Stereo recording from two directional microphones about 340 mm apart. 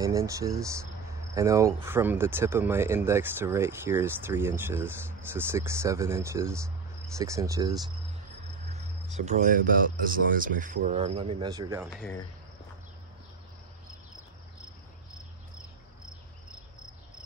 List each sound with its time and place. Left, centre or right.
0.0 s speech: centre